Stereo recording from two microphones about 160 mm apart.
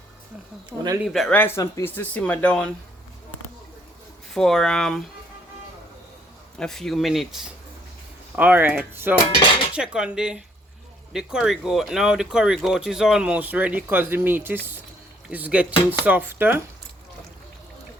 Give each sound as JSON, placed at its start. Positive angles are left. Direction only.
{"t": 0.7, "sound": "speech", "side_deg": 0}
{"t": 1.4, "sound": "speech", "side_deg": 15}
{"t": 4.4, "sound": "speech", "side_deg": 5}
{"t": 6.6, "sound": "speech", "side_deg": 5}